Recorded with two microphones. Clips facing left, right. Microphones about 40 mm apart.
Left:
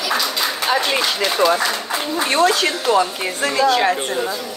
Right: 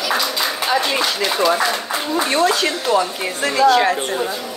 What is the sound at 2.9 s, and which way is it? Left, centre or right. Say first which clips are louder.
Speech: left 1 dB; left.